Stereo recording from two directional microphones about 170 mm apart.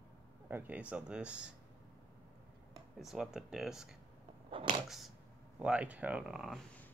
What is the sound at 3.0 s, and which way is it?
Speech, 5° right (ahead or behind).